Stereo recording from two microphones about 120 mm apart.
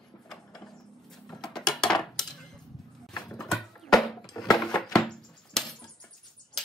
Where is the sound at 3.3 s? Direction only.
5° left (ahead or behind).